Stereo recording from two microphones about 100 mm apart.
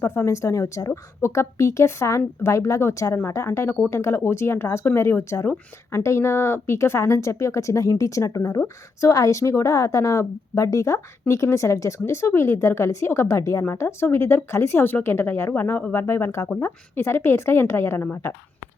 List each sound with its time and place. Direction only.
0.0 s speech: 25° left (ahead or behind)